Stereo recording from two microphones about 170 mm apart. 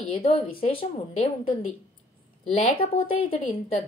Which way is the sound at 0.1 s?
35° left (ahead or behind).